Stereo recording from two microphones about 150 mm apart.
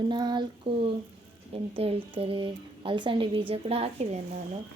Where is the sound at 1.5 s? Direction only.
40° right (ahead or behind).